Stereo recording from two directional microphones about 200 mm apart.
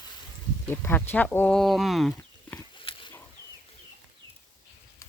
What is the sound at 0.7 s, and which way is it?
Speech, 10° left (ahead or behind).